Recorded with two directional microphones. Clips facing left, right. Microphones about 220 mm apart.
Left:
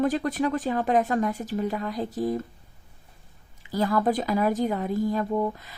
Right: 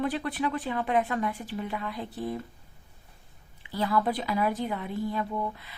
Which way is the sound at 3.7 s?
45° left (ahead or behind).